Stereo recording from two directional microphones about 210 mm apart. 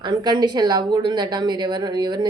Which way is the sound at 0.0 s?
20° right (ahead or behind).